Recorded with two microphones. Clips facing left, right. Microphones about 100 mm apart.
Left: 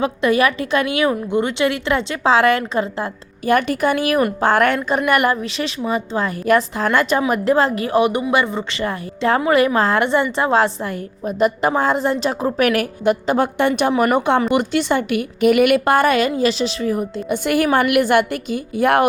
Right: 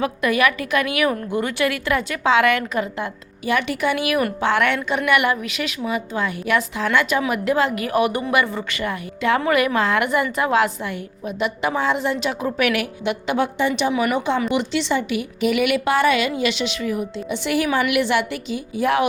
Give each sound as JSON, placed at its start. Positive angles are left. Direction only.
{"t": 0.0, "sound": "a woman's voice", "side_deg": 30}
{"t": 3.4, "sound": "a woman's voice", "side_deg": 45}
{"t": 13.6, "sound": "a woman's voice", "side_deg": 60}
{"t": 13.9, "sound": "a woman's voice", "side_deg": 45}
{"t": 17.2, "sound": "a woman's voice", "side_deg": 50}